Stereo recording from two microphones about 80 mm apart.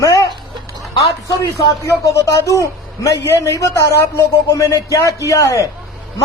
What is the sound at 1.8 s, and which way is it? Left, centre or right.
A man's voice, left.